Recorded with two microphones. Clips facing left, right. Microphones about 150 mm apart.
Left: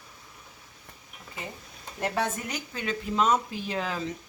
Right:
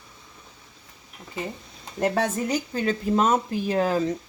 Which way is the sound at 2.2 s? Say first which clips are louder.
Right 6 dB; 40° right (ahead or behind).